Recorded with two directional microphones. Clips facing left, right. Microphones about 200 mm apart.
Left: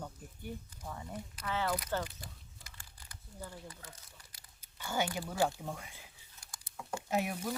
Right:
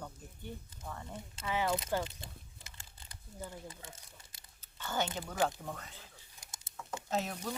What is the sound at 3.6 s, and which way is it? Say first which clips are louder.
Speech: right 2 dB; 25° right (ahead or behind).